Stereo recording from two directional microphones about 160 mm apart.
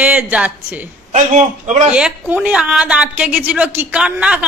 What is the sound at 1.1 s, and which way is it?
Speech, 45° right (ahead or behind).